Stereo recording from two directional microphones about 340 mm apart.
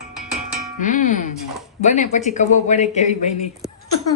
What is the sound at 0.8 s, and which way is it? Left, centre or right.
Speech, left.